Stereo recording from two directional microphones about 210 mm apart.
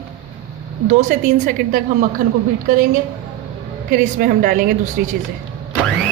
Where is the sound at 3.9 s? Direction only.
40° right (ahead or behind).